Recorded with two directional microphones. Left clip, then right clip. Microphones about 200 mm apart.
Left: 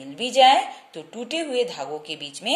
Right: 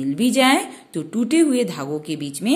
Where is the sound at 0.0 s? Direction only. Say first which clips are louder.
Left 1 dB; 20° right (ahead or behind).